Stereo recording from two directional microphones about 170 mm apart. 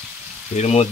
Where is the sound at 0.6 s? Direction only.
40° left (ahead or behind).